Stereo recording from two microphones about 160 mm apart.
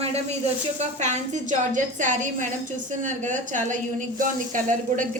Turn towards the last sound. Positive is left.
turn(degrees=-55)  # may be behind; listen again after turning